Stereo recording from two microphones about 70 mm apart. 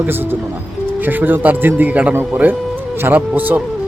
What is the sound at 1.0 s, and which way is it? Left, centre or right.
A man's voice, right.